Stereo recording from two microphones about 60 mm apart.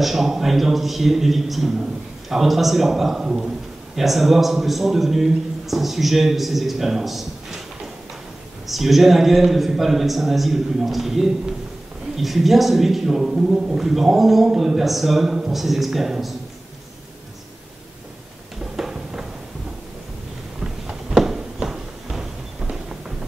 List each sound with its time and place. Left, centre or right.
0.0 s a man's voice: centre
18.8 s music: centre
20.6 s a sound: centre